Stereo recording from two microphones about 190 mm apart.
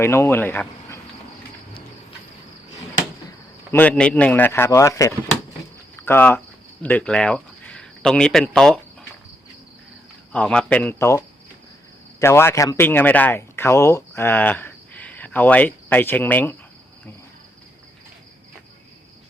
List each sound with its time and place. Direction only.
0.0 s speech: 15° left (ahead or behind)
3.7 s speech: 10° left (ahead or behind)
10.3 s speech: 5° left (ahead or behind)
12.2 s speech: 15° left (ahead or behind)